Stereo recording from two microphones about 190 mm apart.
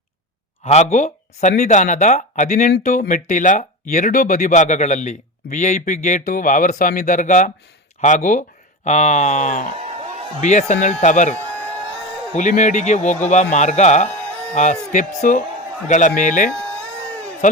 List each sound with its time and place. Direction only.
0.6 s speech: 35° left (ahead or behind)